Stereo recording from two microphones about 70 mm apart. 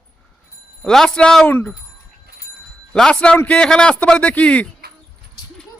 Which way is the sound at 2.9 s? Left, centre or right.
Centre.